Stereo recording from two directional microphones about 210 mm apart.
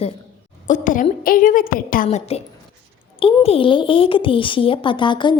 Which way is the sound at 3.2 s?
25° left (ahead or behind).